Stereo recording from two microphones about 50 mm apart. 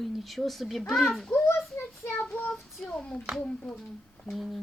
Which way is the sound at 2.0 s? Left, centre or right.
Left.